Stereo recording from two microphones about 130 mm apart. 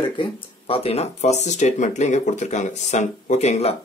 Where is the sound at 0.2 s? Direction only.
45° left (ahead or behind).